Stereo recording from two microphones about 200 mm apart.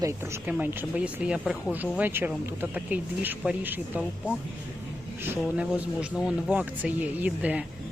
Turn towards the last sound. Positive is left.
turn(degrees=-5)  # may be behind; listen again after turning